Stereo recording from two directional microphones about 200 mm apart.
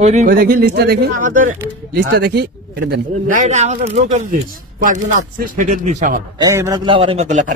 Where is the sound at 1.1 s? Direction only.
40° right (ahead or behind).